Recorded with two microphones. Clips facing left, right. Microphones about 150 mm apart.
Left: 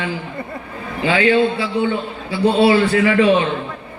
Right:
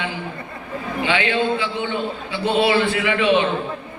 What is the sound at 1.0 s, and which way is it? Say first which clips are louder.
A man's voice: left 6 dB; 35° left (ahead or behind).